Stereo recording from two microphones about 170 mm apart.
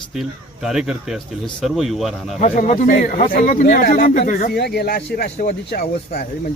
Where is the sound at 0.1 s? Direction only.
5° right (ahead or behind).